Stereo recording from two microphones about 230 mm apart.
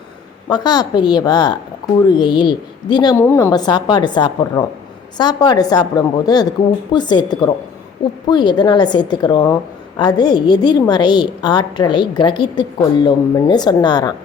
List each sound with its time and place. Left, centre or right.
0.4 s a woman's voice: centre